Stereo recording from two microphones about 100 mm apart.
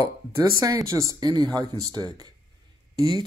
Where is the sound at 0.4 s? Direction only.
35° right (ahead or behind).